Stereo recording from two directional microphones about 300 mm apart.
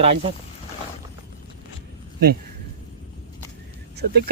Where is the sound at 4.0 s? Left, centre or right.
Right.